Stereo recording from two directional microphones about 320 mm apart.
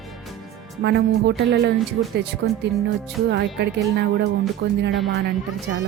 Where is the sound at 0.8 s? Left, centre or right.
Right.